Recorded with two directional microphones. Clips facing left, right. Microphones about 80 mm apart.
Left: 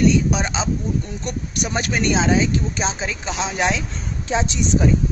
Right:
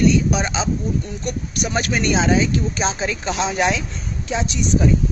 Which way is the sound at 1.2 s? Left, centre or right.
Left.